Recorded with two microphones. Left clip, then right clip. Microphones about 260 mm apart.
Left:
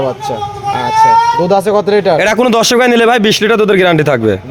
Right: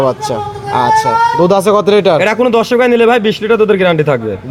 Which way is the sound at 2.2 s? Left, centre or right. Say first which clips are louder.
Left 1 dB; left.